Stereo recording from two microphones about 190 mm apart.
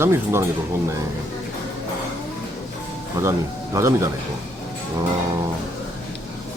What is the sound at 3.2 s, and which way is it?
Speech, 15° right (ahead or behind).